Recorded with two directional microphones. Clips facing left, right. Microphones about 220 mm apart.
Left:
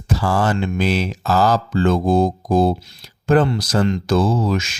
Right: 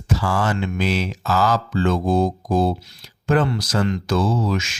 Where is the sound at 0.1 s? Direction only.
35° left (ahead or behind).